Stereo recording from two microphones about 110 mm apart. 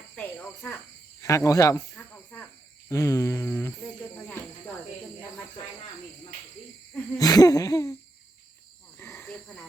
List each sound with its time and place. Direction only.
0.2 s cricket: 15° left (ahead or behind)
1.2 s speech: 30° left (ahead or behind)
7.2 s hoot: 35° left (ahead or behind)
9.0 s cricket: 20° left (ahead or behind)